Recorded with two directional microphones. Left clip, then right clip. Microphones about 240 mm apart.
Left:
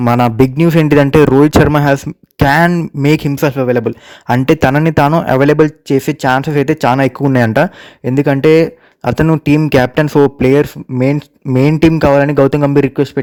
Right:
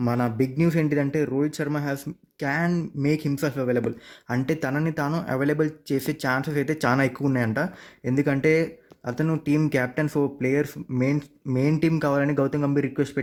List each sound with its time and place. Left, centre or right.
0.0 s speech: left